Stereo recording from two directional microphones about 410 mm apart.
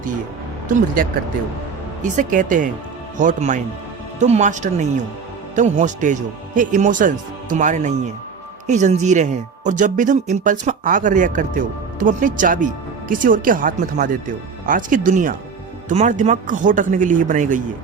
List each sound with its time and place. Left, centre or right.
2.1 s speech: centre